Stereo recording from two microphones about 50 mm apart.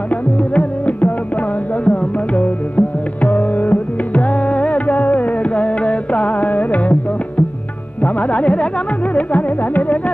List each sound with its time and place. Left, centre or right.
0.1 s music: left